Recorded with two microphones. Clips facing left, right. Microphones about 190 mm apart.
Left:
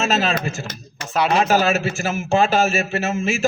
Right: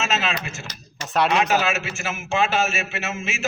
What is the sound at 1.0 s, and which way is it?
Speech, centre (ahead or behind).